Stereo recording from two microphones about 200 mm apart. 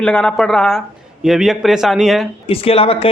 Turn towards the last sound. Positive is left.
turn(degrees=30)  # may be behind; listen again after turning